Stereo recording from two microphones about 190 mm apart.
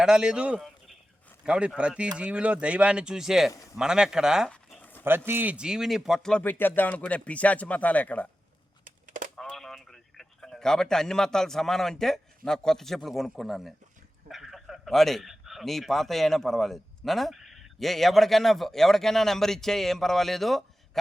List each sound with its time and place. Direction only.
0.0 s a man's voice: 5° right (ahead or behind)
5.0 s a man's voice: 10° right (ahead or behind); by 8.3 s 10° left (ahead or behind)
8.8 s goose: 45° right (ahead or behind)
9.3 s a sound: 5° left (ahead or behind)
12.5 s a man's voice: centre (ahead or behind)